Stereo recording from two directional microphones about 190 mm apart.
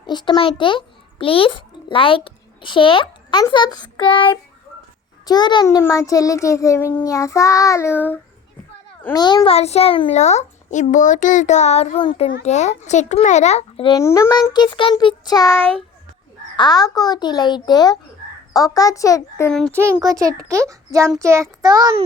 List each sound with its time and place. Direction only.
0.0 s a child's voice: 25° left (ahead or behind)
9.1 s a child's voice: 25° left (ahead or behind)
14.0 s child singing: 15° left (ahead or behind)
16.6 s child singing: 20° left (ahead or behind)
18.5 s a child's voice: 20° left (ahead or behind)
19.5 s a child's voice: 5° left (ahead or behind)
19.7 s a child's voice: 15° right (ahead or behind)